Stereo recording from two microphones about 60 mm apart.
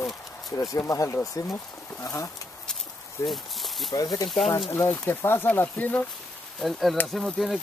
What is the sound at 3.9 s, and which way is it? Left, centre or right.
Speech, left.